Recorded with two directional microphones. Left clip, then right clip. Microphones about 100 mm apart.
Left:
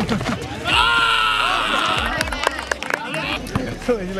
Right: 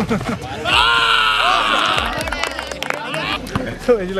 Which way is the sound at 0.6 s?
25° right (ahead or behind).